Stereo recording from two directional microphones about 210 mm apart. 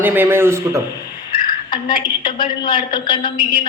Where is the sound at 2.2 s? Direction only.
20° left (ahead or behind).